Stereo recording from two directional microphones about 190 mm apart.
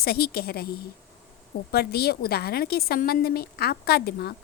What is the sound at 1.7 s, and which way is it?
A woman's voice, 55° left (ahead or behind).